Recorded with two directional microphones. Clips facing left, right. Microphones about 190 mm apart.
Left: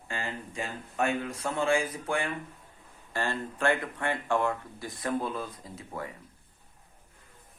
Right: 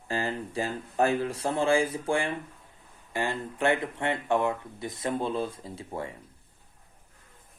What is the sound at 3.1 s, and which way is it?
A man's voice, 15° right (ahead or behind).